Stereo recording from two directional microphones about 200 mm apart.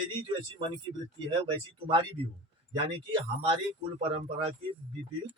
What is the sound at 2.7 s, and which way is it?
Speech, 25° right (ahead or behind).